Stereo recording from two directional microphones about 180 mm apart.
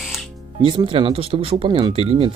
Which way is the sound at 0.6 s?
30° right (ahead or behind).